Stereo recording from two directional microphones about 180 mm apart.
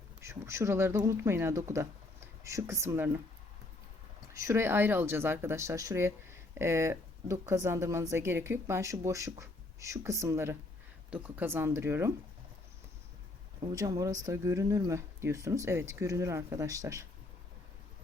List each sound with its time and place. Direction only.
0.2 s speech: 15° right (ahead or behind)
4.4 s speech: 15° right (ahead or behind)
13.6 s speech: 20° right (ahead or behind)